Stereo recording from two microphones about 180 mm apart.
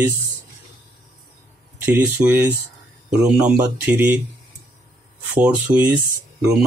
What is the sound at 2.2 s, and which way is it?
Speech, 15° right (ahead or behind).